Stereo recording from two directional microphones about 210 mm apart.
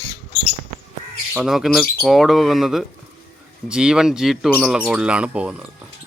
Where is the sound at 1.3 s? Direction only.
5° right (ahead or behind).